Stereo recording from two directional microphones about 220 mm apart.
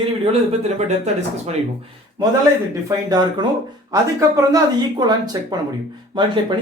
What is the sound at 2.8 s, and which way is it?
Speech, 20° right (ahead or behind).